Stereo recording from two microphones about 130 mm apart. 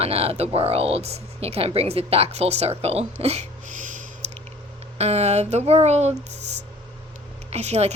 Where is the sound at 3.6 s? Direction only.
75° right (ahead or behind).